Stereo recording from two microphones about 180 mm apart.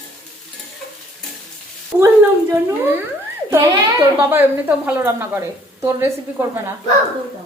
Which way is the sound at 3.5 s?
15° right (ahead or behind).